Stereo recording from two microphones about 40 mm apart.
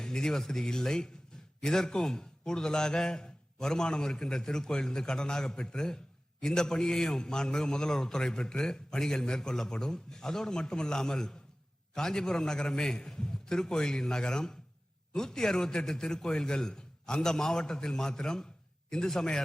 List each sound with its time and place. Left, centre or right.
0.0 s a man's voice: centre